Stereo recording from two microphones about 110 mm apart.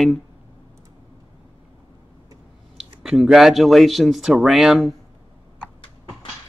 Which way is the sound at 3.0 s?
5° right (ahead or behind).